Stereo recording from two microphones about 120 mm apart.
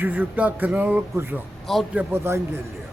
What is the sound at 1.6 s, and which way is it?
Speech, centre (ahead or behind).